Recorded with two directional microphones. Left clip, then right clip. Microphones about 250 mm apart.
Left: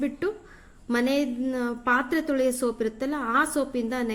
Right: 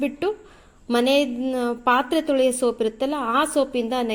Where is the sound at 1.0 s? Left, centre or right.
Centre.